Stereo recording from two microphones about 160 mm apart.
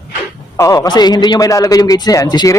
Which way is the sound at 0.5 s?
20° left (ahead or behind).